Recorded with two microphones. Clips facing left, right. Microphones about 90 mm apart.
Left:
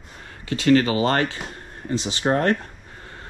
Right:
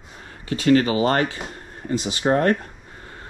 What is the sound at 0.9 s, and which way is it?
Speech, 30° right (ahead or behind).